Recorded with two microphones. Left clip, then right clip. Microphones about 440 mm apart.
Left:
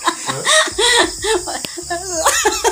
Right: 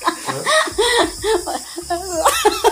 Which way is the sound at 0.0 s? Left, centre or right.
Right.